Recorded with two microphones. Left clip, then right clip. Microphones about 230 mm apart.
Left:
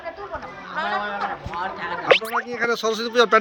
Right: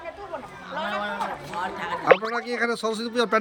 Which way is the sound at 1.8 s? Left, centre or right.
Centre.